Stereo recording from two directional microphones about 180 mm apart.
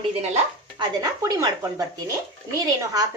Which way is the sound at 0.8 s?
20° right (ahead or behind).